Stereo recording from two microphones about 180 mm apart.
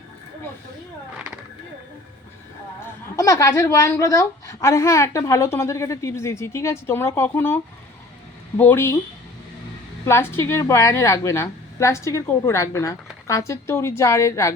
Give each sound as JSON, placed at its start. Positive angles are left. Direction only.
{"t": 3.2, "sound": "a woman's voice", "side_deg": 15}
{"t": 10.1, "sound": "a woman's voice", "side_deg": 15}